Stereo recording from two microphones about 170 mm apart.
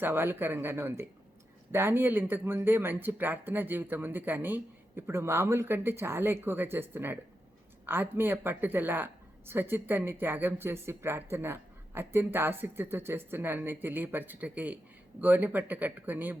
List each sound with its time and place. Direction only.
0.0 s speech: 10° right (ahead or behind)